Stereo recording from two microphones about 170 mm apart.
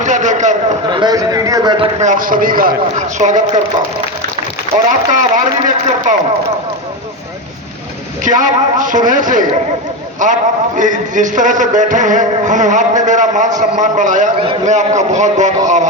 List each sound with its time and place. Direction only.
0.0 s a sound: 45° right (ahead or behind)
0.9 s a sound: 25° right (ahead or behind)
2.0 s a man's voice: 50° right (ahead or behind)
3.2 s music: 45° right (ahead or behind)
4.9 s music: 50° right (ahead or behind)
8.2 s music: 50° right (ahead or behind)
10.2 s a man's voice: 50° right (ahead or behind)
10.8 s music: 50° right (ahead or behind)